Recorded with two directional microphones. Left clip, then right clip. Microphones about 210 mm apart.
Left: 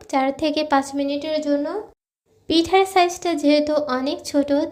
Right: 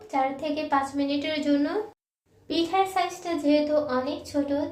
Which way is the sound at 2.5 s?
45° left (ahead or behind).